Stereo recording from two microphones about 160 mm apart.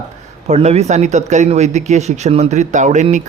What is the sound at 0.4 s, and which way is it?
Speech, 45° right (ahead or behind).